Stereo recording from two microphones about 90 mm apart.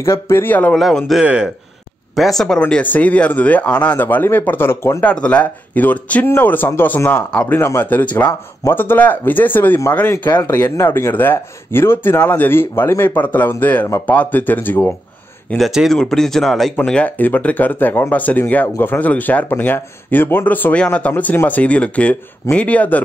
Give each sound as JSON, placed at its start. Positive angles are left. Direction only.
{"t": 0.0, "sound": "speech", "side_deg": 30}
{"t": 0.7, "sound": "speech", "side_deg": 0}
{"t": 1.2, "sound": "speech", "side_deg": -10}
{"t": 2.1, "sound": "speech", "side_deg": 0}
{"t": 2.6, "sound": "speech", "side_deg": 15}
{"t": 5.0, "sound": "speech", "side_deg": 15}
{"t": 15.5, "sound": "speech", "side_deg": -5}